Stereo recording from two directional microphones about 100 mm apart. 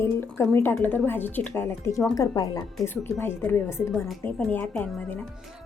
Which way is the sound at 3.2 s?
20° left (ahead or behind).